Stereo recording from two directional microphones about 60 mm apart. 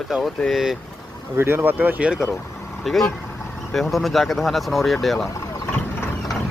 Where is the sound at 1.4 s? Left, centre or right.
Right.